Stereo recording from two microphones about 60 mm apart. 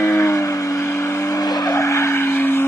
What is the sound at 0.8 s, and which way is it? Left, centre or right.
Vehicle, left.